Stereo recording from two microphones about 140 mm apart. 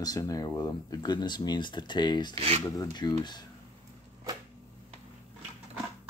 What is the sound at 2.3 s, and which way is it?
Speech, 45° right (ahead or behind).